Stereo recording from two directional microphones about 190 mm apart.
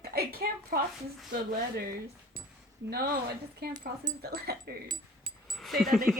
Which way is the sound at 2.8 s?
50° right (ahead or behind).